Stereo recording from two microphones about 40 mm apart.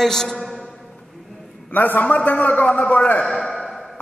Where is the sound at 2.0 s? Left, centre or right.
Left.